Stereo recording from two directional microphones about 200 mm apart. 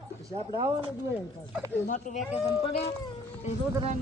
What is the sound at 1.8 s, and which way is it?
Speech, 40° left (ahead or behind).